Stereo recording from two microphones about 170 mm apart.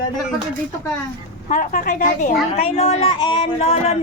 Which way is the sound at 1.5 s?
50° left (ahead or behind).